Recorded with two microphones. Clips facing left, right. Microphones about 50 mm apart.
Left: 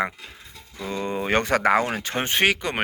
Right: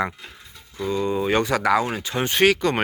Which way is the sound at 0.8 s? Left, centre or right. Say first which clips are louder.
Right 4 dB; left.